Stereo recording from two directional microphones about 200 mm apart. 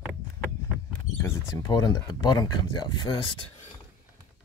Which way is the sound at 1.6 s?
20° left (ahead or behind).